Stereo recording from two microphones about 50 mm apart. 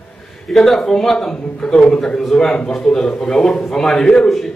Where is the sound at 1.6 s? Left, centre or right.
Left.